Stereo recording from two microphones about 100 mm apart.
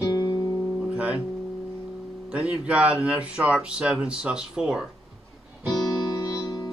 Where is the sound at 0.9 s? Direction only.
15° right (ahead or behind).